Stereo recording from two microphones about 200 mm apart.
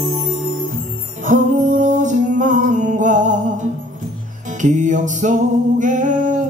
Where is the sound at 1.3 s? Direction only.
40° right (ahead or behind).